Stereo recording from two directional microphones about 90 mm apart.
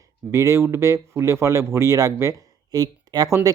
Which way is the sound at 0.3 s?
35° right (ahead or behind).